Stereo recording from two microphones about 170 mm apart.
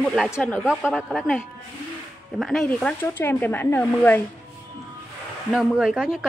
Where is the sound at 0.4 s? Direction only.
5° left (ahead or behind).